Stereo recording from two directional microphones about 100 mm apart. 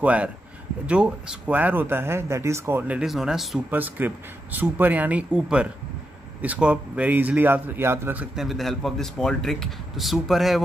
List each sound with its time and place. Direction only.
0.0 s speech: 15° right (ahead or behind)
1.5 s speech: 15° right (ahead or behind)
3.1 s speech: centre (ahead or behind)
3.7 s speech: 20° right (ahead or behind)
8.4 s speech: centre (ahead or behind)